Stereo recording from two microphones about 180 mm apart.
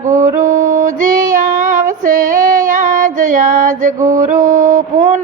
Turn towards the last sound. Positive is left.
turn(degrees=-45)  # may be behind; listen again after turning